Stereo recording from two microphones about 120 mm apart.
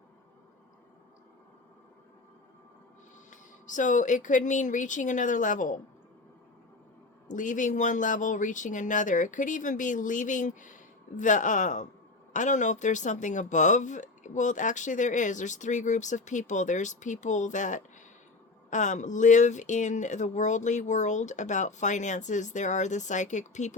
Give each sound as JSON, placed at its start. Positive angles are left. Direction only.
{"t": 3.2, "sound": "speech", "side_deg": 90}
{"t": 7.3, "sound": "speech", "side_deg": 90}